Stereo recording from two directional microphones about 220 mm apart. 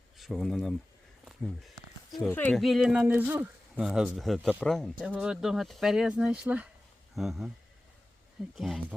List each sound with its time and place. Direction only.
0.2 s speech: centre (ahead or behind)
1.2 s a sound: centre (ahead or behind)
2.3 s speech: 5° left (ahead or behind)
8.5 s speech: centre (ahead or behind)